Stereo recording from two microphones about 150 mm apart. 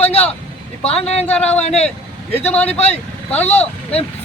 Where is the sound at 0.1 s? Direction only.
45° left (ahead or behind).